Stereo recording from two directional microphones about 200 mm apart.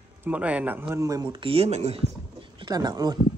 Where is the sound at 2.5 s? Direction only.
20° right (ahead or behind).